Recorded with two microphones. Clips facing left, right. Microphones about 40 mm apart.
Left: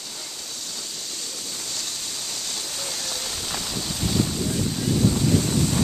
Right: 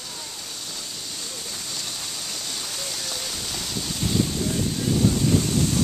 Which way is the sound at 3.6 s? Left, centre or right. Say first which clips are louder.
Right 2 dB; centre.